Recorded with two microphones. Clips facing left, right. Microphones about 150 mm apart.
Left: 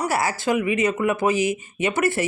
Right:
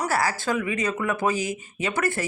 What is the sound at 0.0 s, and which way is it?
Speech, 20° left (ahead or behind).